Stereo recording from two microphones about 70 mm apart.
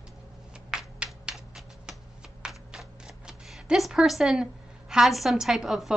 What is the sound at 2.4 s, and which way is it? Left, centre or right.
Camera, centre.